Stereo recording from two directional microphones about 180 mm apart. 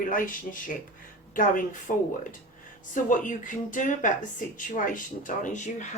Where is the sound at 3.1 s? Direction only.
45° left (ahead or behind).